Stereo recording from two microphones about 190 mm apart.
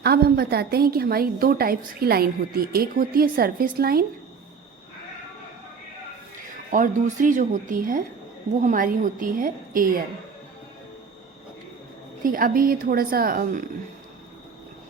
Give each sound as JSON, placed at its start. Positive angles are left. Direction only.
{"t": 0.0, "sound": "a woman's voice", "side_deg": -55}
{"t": 6.7, "sound": "a woman's voice", "side_deg": -45}
{"t": 12.2, "sound": "a woman's voice", "side_deg": -50}